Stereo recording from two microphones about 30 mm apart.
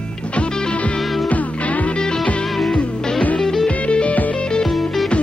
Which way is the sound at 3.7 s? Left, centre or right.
Left.